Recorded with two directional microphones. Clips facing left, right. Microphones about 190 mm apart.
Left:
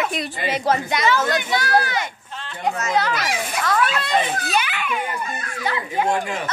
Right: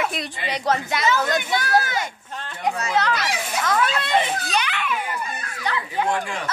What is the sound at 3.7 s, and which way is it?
Speech, 20° right (ahead or behind).